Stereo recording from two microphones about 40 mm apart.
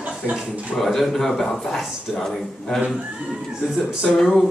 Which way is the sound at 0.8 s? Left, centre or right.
Centre.